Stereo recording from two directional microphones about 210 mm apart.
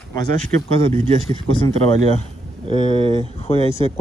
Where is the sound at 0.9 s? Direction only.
30° right (ahead or behind).